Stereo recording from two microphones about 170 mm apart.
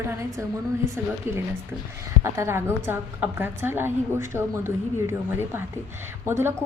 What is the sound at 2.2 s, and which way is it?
A woman's voice, 15° right (ahead or behind).